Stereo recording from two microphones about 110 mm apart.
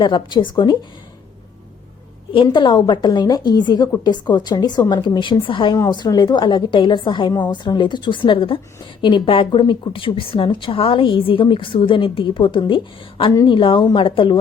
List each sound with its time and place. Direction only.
0.0 s a woman's voice: 40° left (ahead or behind)
2.3 s a woman's voice: 50° left (ahead or behind)